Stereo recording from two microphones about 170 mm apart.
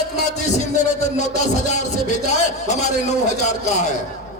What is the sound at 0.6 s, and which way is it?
Speech, 45° left (ahead or behind).